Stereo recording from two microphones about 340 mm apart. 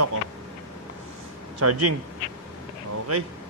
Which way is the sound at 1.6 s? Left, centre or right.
Right.